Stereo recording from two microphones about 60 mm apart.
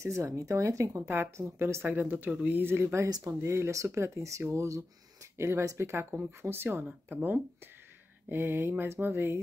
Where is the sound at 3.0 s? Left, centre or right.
Right.